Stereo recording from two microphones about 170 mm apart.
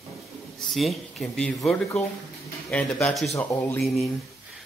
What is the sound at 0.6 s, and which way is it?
Speech, centre (ahead or behind).